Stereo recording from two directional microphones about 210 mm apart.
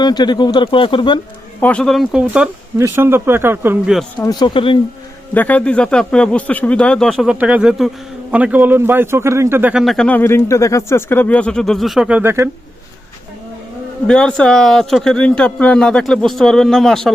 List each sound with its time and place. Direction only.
0.0 s speech: 20° left (ahead or behind)
1.6 s speech: 5° left (ahead or behind)
4.2 s speech: 20° left (ahead or behind)
5.3 s a man's voice: 10° left (ahead or behind); by 12.5 s 10° right (ahead or behind)
14.1 s a man's voice: 5° left (ahead or behind)